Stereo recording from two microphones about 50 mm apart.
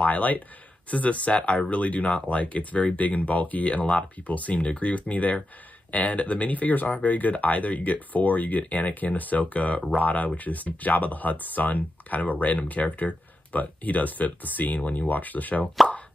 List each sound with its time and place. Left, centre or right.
0.0 s speech: left